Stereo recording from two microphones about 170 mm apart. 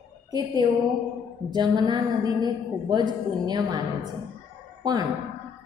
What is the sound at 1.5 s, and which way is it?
A woman's voice, 25° right (ahead or behind).